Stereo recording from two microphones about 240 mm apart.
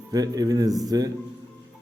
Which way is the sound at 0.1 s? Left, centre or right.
Centre.